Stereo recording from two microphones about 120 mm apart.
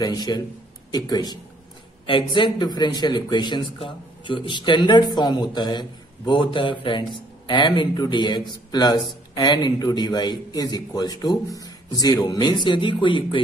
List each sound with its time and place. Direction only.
0.0 s a man's voice: 35° left (ahead or behind)